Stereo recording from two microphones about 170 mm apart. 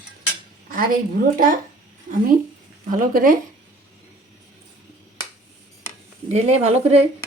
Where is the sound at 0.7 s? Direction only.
55° right (ahead or behind).